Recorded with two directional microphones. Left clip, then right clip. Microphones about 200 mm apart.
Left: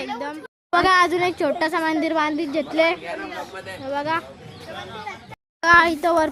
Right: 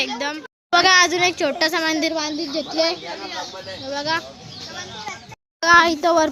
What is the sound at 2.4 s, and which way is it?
Speech, 35° left (ahead or behind).